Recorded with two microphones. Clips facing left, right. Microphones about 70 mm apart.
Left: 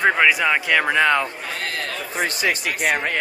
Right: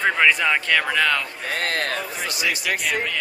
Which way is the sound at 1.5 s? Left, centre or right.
Right.